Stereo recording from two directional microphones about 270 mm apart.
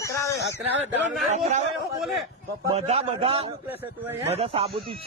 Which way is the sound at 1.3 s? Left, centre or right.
Right.